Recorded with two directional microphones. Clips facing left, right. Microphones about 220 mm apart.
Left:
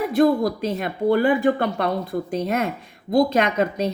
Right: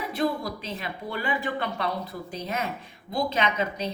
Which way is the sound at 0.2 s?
50° left (ahead or behind).